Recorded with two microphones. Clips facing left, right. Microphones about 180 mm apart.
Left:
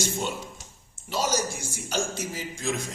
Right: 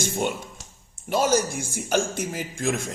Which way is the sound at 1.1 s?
55° right (ahead or behind).